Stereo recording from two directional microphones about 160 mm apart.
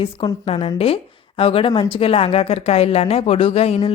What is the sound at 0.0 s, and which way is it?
A woman's voice, 35° left (ahead or behind).